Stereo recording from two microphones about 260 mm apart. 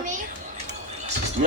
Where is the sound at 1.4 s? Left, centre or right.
Right.